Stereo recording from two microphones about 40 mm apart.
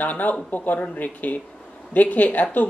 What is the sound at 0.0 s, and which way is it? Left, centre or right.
A man's voice, left.